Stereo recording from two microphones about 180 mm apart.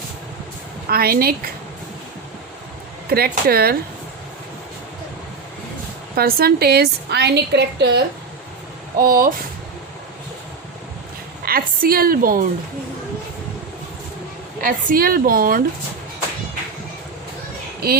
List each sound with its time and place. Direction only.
0.9 s a woman's voice: 55° right (ahead or behind)
3.1 s a woman's voice: 60° right (ahead or behind)
6.1 s a woman's voice: 60° right (ahead or behind)
9.0 s speech: 50° right (ahead or behind)
11.4 s speech: 55° right (ahead or behind)
14.6 s speech: 50° right (ahead or behind)